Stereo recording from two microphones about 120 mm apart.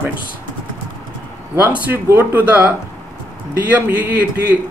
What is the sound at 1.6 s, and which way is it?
Speech, 15° right (ahead or behind).